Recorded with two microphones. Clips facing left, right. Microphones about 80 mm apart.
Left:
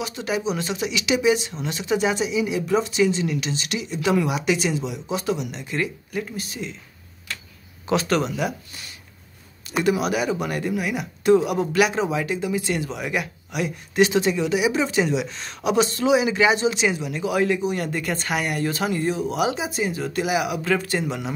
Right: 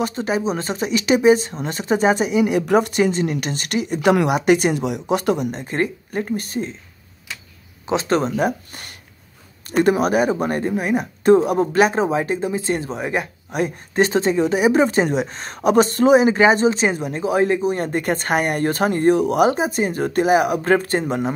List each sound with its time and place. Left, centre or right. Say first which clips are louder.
0.0 s speech: right 5 dB; right
4.4 s speech: right 6 dB; right
7.8 s speech: right 2 dB; right